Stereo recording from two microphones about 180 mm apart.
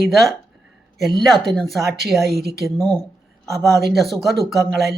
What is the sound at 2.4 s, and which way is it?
Speech, 60° right (ahead or behind).